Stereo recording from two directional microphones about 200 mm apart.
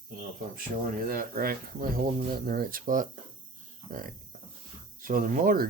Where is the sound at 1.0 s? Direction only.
45° right (ahead or behind).